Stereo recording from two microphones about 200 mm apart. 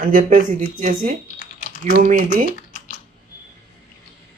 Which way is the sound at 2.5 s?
45° left (ahead or behind).